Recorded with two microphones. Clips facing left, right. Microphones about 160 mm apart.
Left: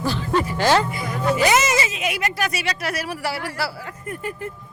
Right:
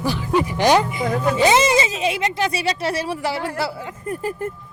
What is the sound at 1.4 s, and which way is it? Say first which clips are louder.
Speech: right 4 dB; 30° right (ahead or behind).